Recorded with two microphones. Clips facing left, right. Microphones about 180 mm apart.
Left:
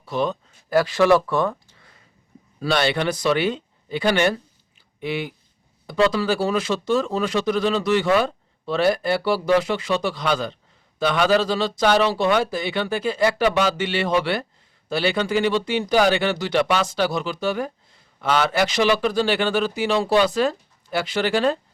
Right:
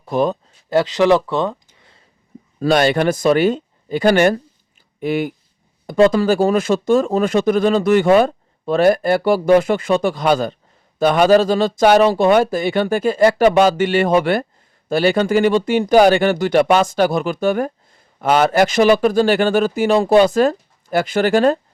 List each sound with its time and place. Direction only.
0.0 s speech: 45° right (ahead or behind)
0.7 s speech: 20° right (ahead or behind)
2.6 s speech: 45° right (ahead or behind)